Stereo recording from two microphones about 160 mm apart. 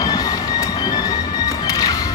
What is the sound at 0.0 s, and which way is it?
Train, 25° left (ahead or behind).